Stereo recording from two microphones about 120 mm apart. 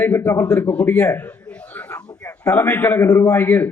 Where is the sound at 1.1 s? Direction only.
15° left (ahead or behind).